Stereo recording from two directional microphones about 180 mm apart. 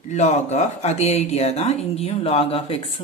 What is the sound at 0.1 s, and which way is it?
Speech, 40° left (ahead or behind).